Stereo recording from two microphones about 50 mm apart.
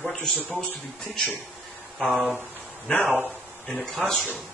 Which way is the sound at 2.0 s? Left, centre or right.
Centre.